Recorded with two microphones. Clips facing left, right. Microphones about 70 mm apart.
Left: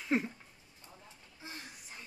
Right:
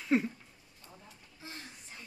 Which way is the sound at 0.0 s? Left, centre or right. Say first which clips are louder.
Right 3 dB; centre.